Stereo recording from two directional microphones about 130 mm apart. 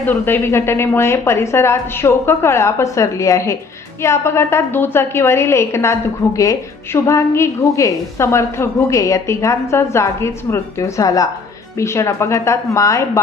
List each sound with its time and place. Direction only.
0.0 s a woman's voice: 15° left (ahead or behind)